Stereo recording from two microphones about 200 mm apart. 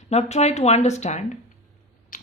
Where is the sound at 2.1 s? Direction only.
40° left (ahead or behind).